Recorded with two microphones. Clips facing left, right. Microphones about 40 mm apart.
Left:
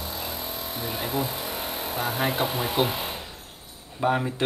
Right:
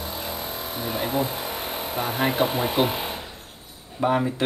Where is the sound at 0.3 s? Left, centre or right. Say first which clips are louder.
Right 2 dB; right.